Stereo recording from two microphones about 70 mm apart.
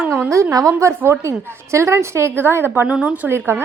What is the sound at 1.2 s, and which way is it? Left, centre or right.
A woman's voice, right.